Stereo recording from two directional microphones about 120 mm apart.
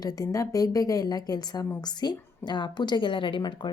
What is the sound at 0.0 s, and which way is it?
Speech, 30° left (ahead or behind).